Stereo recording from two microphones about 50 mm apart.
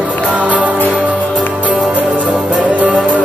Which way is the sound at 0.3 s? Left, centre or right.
Right.